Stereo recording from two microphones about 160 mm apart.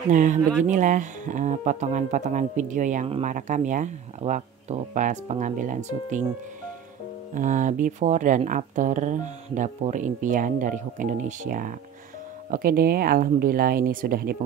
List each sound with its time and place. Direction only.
0.1 s speech: 50° right (ahead or behind)
7.3 s speech: 55° right (ahead or behind)